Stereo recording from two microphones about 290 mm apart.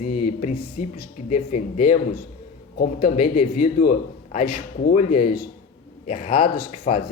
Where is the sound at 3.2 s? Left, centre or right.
Left.